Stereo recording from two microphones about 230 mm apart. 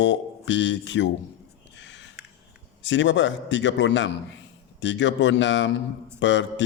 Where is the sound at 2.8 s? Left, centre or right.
Left.